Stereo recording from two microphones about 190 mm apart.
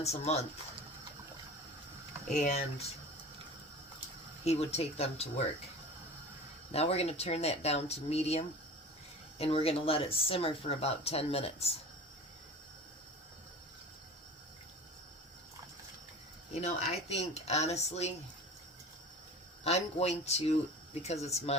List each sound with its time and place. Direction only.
0.0 s speech: 35° left (ahead or behind)
2.4 s speech: 35° left (ahead or behind)
4.4 s speech: 35° left (ahead or behind)
6.7 s speech: 35° left (ahead or behind)
16.6 s speech: 35° left (ahead or behind)
19.6 s speech: 35° left (ahead or behind)